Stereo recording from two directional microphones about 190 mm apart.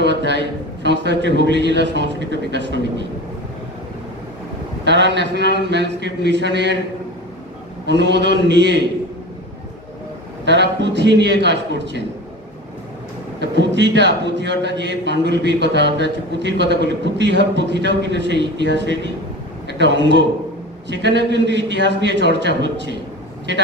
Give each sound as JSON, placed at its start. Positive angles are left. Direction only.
{"t": 0.0, "sound": "a man's voice", "side_deg": -65}
{"t": 4.8, "sound": "a man's voice", "side_deg": -65}
{"t": 7.8, "sound": "a man's voice", "side_deg": -65}
{"t": 10.4, "sound": "a man's voice", "side_deg": -65}
{"t": 13.4, "sound": "a man's voice", "side_deg": -65}